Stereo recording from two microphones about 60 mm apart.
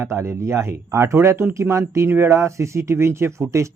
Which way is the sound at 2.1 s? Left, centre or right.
Right.